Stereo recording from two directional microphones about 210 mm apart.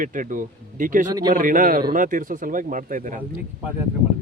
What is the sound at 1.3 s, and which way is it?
Speech, 40° right (ahead or behind).